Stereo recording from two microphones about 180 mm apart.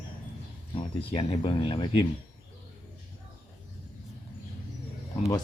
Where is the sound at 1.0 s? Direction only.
30° left (ahead or behind).